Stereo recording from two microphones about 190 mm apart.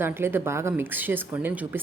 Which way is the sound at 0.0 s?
10° right (ahead or behind).